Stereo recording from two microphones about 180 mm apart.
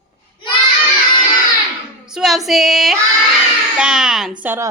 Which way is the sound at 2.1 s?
Centre (ahead or behind).